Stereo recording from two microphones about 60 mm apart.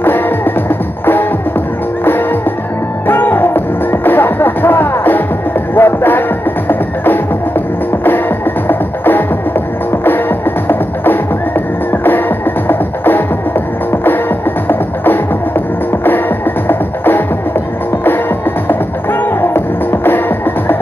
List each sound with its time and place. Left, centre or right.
0.7 s music: left
3.1 s music: left
14.7 s music: left
19.4 s music: left